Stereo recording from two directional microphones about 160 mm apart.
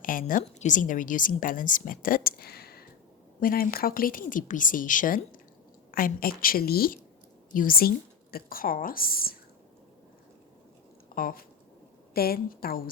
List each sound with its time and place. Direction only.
0.0 s a woman's voice: 60° left (ahead or behind); by 2.8 s 80° left
3.4 s a woman's voice: 65° left (ahead or behind)
11.1 s a woman's voice: 65° left (ahead or behind)